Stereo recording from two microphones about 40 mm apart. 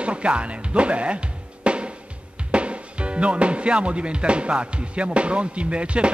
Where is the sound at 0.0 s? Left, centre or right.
Right.